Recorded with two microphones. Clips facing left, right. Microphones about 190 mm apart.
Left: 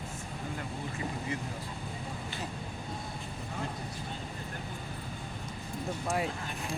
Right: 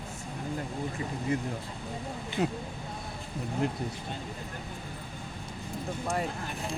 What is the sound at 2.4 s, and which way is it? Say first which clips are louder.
Speech: right 14 dB; 65° right (ahead or behind).